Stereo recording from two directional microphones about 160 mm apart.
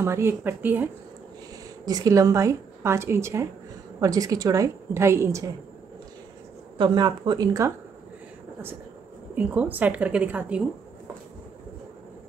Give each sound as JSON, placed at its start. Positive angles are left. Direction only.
{"t": 0.0, "sound": "a woman's voice", "side_deg": -15}
{"t": 1.9, "sound": "a woman's voice", "side_deg": -25}
{"t": 6.8, "sound": "a woman's voice", "side_deg": -25}
{"t": 9.3, "sound": "a woman's voice", "side_deg": -10}